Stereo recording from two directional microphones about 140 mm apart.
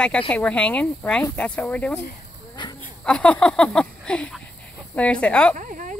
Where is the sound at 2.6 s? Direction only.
35° left (ahead or behind).